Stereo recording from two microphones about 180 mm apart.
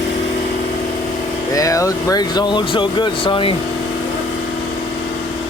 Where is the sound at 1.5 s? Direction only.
20° left (ahead or behind).